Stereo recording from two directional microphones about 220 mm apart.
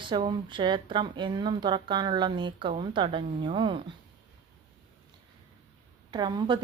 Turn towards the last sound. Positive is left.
turn(degrees=-20)  # may be behind; listen again after turning